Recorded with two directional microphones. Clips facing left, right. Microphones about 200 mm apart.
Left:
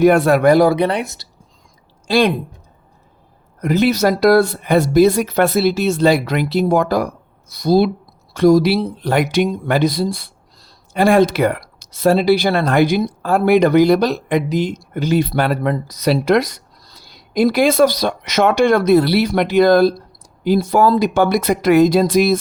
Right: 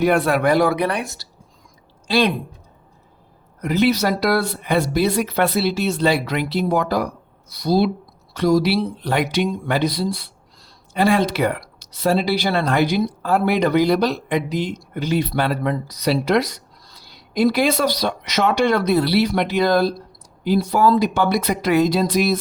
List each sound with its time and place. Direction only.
0.0 s speech: 45° left (ahead or behind)
0.8 s speech: 25° left (ahead or behind)
2.0 s speech: 45° left (ahead or behind)
3.6 s speech: 45° left (ahead or behind)